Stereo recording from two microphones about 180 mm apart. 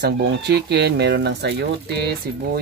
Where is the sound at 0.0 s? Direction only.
65° right (ahead or behind).